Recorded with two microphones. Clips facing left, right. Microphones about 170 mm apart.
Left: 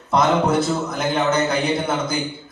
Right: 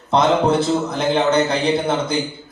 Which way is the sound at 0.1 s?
30° right (ahead or behind).